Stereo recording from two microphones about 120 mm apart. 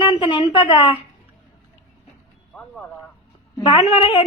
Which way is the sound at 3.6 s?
50° left (ahead or behind).